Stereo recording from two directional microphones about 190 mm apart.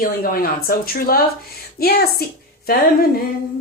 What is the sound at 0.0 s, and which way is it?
Speech, 50° left (ahead or behind).